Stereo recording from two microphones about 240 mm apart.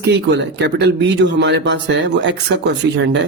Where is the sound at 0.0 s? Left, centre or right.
Right.